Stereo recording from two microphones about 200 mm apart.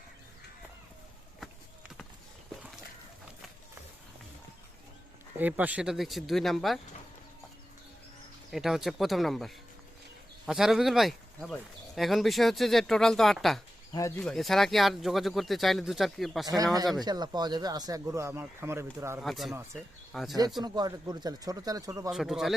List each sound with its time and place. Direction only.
5.4 s speech: 10° right (ahead or behind)
8.4 s speech: centre (ahead or behind)
17.0 s speech: 20° right (ahead or behind)
19.2 s speech: centre (ahead or behind)
20.6 s speech: 20° right (ahead or behind)
22.1 s speech: centre (ahead or behind)